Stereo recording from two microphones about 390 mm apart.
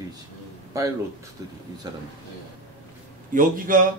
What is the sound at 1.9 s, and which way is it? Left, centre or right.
Speech, centre.